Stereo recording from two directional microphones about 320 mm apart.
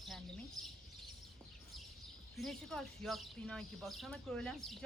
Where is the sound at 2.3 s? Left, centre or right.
Centre.